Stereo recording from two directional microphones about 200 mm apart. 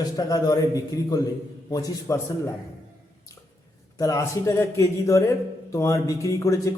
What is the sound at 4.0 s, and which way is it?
A man's voice, 15° left (ahead or behind).